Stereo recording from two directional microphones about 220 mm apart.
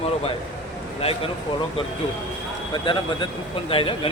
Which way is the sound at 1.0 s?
30° left (ahead or behind).